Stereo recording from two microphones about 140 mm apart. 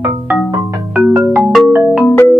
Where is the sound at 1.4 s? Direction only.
Centre (ahead or behind).